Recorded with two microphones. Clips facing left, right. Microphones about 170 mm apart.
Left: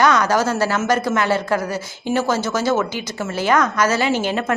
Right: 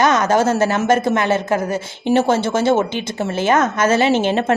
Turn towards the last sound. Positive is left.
turn(degrees=-25)  # may be behind; listen again after turning